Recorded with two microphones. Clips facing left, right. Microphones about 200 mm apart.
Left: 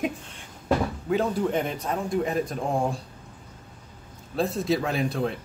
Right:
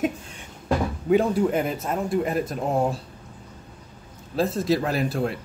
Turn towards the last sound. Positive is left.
turn(degrees=-5)  # may be behind; listen again after turning